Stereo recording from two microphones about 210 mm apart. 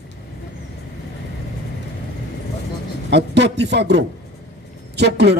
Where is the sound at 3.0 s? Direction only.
55° right (ahead or behind).